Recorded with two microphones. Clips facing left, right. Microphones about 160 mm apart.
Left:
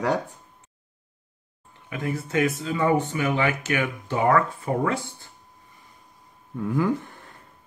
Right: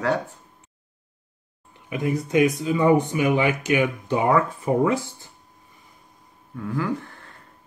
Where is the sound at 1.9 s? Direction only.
15° right (ahead or behind).